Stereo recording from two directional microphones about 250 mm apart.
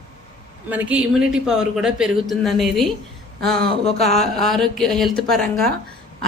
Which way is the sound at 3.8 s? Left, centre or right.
Left.